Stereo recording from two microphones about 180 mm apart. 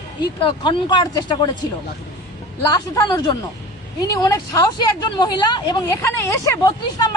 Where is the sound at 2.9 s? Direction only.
20° left (ahead or behind).